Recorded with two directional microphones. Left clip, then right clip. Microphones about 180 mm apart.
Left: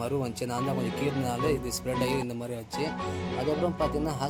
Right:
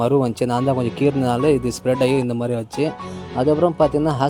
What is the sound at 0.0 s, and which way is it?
Speech, 45° right (ahead or behind).